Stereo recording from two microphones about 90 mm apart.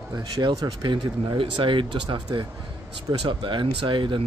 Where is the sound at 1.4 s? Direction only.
70° right (ahead or behind).